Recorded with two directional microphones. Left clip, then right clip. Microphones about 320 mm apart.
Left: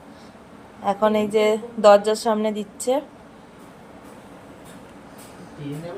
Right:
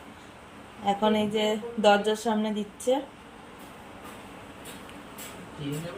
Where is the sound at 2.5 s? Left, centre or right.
Centre.